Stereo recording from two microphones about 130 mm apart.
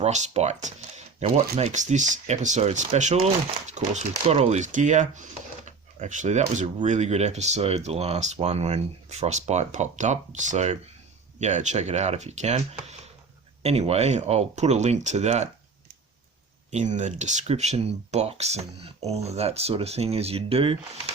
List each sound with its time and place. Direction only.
0.0 s speech: 60° right (ahead or behind)
16.7 s speech: 70° right (ahead or behind); by 20.7 s 50° right (ahead or behind)